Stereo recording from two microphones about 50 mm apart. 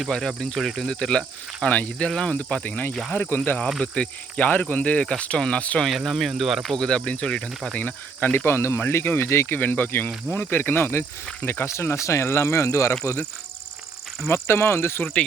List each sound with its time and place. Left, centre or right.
0.1 s speech: centre
0.9 s speech: centre
2.0 s speech: centre
3.1 s speech: left
3.8 s speech: centre
4.4 s speech: left
6.1 s speech: centre
6.7 s speech: centre
7.8 s speech: left
8.4 s speech: left
9.6 s speech: left
11.4 s speech: left
14.3 s speech: left